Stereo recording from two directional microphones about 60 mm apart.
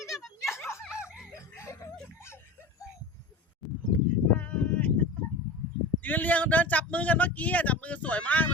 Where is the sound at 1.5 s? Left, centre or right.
Left.